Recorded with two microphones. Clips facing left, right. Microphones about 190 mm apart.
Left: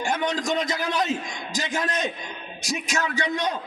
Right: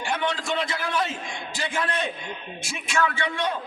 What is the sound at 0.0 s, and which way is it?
A man's voice, 45° left (ahead or behind).